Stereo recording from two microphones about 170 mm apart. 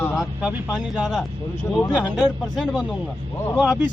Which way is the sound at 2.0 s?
Centre (ahead or behind).